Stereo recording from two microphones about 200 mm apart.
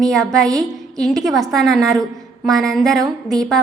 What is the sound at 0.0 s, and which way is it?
A woman's voice, 5° left (ahead or behind).